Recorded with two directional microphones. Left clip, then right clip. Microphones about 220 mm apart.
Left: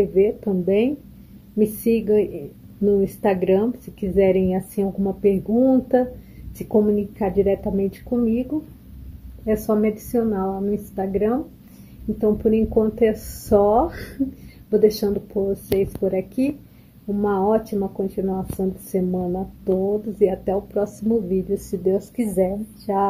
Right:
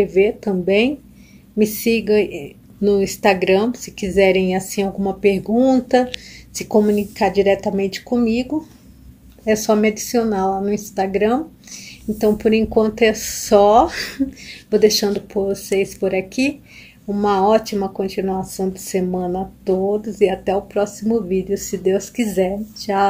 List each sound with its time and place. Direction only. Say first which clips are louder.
0.0 s speech: right 3 dB; 5° right (ahead or behind)